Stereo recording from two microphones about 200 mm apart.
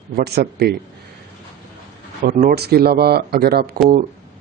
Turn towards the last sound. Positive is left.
turn(degrees=-50)  # may be behind; listen again after turning